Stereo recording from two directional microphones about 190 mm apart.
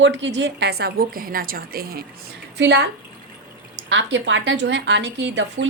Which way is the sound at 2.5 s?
65° right (ahead or behind).